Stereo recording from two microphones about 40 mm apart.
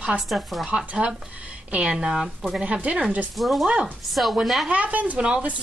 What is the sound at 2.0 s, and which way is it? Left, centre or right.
Speech, right.